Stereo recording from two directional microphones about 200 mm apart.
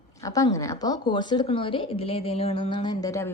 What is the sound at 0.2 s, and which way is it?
A woman's voice, 15° left (ahead or behind).